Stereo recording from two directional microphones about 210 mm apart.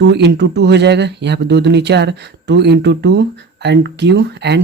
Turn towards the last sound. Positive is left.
turn(degrees=-55)  # may be behind; listen again after turning